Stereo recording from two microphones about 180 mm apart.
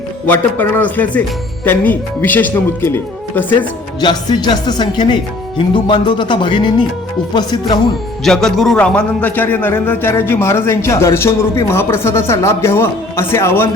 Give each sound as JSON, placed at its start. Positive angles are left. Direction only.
{"t": 0.3, "sound": "a man's voice", "side_deg": 10}
{"t": 4.0, "sound": "speech", "side_deg": 25}
{"t": 8.2, "sound": "a man's voice", "side_deg": 0}